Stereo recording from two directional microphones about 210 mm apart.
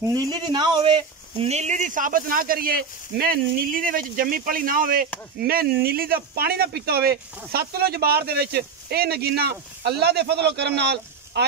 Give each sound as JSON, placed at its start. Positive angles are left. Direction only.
{"t": 0.0, "sound": "speech", "side_deg": -20}